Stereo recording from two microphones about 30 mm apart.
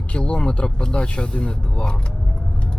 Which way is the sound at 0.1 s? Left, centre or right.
Left.